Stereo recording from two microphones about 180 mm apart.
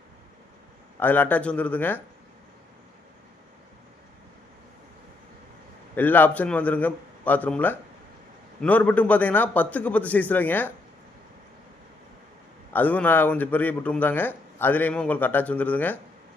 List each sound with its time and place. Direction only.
0.9 s speech: 10° left (ahead or behind)
5.9 s speech: 10° left (ahead or behind)
12.7 s speech: 10° left (ahead or behind)